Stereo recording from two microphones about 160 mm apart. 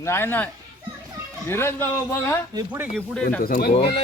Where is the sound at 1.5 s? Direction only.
15° left (ahead or behind).